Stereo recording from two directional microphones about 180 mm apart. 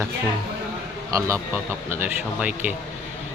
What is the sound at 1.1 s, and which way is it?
Speech, 20° right (ahead or behind).